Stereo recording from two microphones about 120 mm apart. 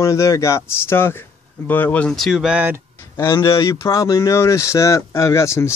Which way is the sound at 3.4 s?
25° left (ahead or behind).